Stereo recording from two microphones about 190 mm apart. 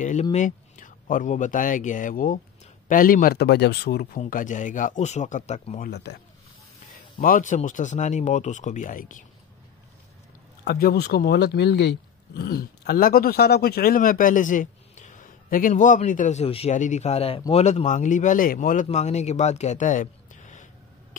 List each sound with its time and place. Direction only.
0.0 s speech: 40° left (ahead or behind); by 4.2 s 55° left (ahead or behind)
4.2 s a man's voice: 45° left (ahead or behind)
5.9 s speech: 60° left (ahead or behind)
7.2 s a man's voice: 45° left (ahead or behind)
10.6 s a man's voice: 55° left (ahead or behind)